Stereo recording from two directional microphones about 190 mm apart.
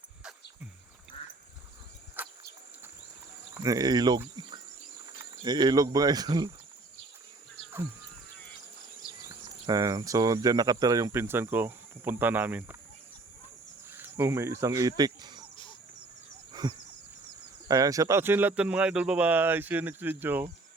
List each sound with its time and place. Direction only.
2.2 s a sound: 10° right (ahead or behind)
3.6 s speech: 20° right (ahead or behind)
4.4 s insect: 25° right (ahead or behind)
5.4 s speech: 20° right (ahead or behind)
9.6 s speech: 20° right (ahead or behind)
13.9 s speech: 10° right (ahead or behind)
16.5 s a sound: 20° right (ahead or behind)
17.7 s speech: 20° right (ahead or behind)